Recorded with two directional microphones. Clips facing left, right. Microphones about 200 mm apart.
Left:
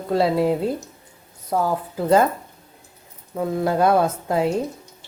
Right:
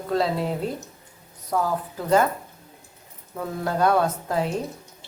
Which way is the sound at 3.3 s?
25° left (ahead or behind).